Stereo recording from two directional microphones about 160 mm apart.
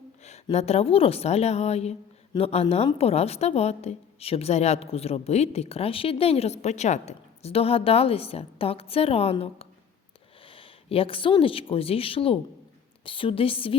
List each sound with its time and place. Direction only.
0.5 s a woman's voice: 40° left (ahead or behind)